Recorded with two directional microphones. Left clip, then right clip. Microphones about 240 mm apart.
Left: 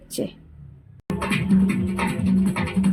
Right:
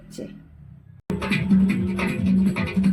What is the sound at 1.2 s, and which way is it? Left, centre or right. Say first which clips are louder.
Music: even; left.